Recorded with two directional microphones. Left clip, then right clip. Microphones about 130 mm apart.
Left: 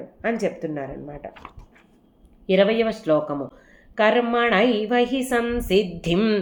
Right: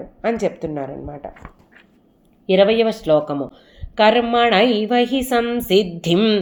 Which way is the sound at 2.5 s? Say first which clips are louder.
Right 4 dB; 30° right (ahead or behind).